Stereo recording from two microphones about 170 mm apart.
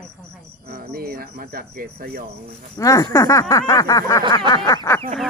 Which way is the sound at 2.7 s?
20° left (ahead or behind).